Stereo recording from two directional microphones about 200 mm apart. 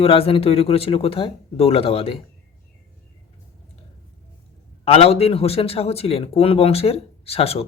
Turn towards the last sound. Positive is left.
turn(degrees=30)  # may be behind; listen again after turning